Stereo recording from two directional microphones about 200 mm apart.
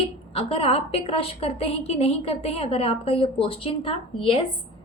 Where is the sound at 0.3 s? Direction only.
30° left (ahead or behind).